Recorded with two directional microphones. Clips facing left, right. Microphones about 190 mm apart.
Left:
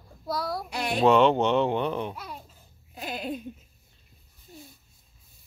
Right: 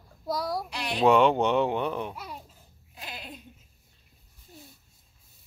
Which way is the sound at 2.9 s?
50° left (ahead or behind).